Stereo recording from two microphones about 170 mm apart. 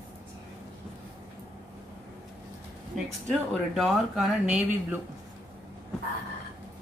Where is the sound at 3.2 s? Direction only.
Centre (ahead or behind).